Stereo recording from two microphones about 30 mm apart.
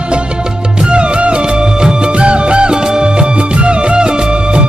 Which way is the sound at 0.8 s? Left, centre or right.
Right.